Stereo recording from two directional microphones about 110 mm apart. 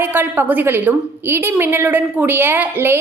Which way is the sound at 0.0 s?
20° right (ahead or behind).